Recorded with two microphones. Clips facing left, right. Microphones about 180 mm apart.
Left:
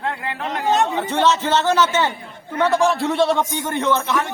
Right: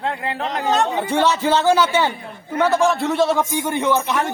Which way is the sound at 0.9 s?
10° right (ahead or behind).